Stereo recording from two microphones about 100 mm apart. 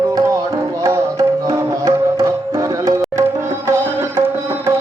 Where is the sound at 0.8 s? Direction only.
30° right (ahead or behind).